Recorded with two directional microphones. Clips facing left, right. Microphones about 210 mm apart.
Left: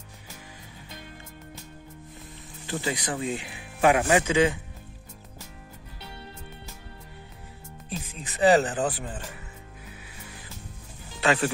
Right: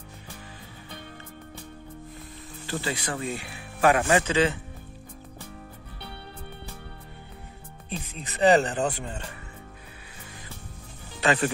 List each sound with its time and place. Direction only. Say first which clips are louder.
2.6 s speech: left 1 dB; 15° left (ahead or behind)
7.9 s speech: right 1 dB; centre (ahead or behind)
11.1 s speech: even; centre (ahead or behind)